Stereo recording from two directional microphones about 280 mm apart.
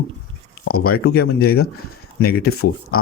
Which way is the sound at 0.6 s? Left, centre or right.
Left.